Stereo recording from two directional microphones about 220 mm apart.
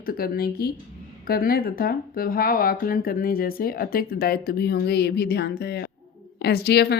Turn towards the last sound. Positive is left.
turn(degrees=50)  # may be behind; listen again after turning